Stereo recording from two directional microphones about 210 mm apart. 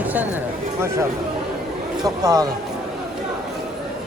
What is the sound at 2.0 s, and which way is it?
Speech, 15° right (ahead or behind).